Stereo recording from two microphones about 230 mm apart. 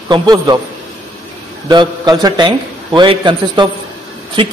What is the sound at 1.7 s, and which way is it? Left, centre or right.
A man's voice, centre.